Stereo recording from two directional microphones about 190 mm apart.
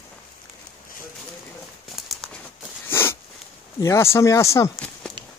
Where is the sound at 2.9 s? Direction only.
15° left (ahead or behind).